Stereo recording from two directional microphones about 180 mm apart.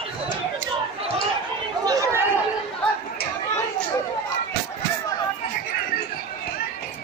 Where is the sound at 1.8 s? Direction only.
15° right (ahead or behind).